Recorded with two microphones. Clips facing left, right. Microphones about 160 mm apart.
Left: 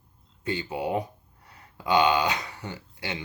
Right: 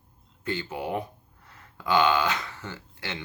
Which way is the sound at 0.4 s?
20° left (ahead or behind).